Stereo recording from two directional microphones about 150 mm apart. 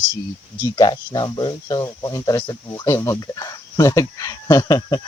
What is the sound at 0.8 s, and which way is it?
Speech, 30° left (ahead or behind).